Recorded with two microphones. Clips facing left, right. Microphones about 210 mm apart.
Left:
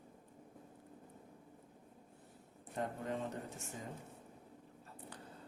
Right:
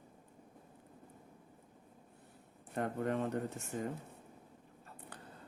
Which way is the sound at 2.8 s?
60° right (ahead or behind).